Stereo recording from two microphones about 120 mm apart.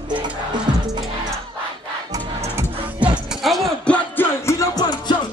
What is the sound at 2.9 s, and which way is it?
Music, 10° right (ahead or behind).